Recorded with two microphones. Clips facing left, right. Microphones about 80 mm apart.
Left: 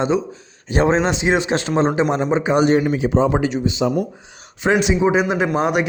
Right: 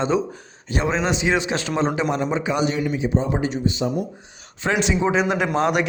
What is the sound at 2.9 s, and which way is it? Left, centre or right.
Speech, left.